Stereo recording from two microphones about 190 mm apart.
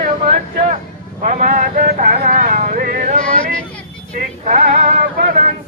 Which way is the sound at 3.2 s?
5° left (ahead or behind).